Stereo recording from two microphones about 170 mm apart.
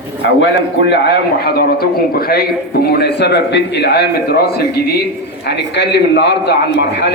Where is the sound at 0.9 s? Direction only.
70° left (ahead or behind).